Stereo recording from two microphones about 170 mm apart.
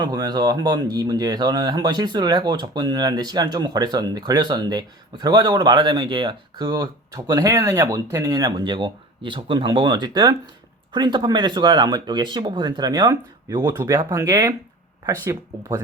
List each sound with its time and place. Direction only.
0.0 s speech: 25° right (ahead or behind)